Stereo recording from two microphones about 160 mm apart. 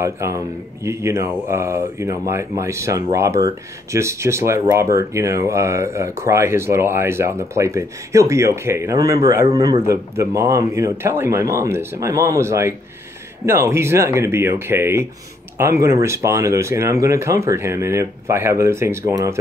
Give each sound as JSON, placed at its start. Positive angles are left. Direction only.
{"t": 0.0, "sound": "a man's voice", "side_deg": -20}